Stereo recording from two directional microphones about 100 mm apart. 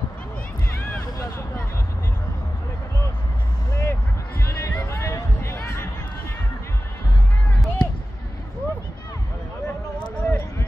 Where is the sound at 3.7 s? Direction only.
30° left (ahead or behind).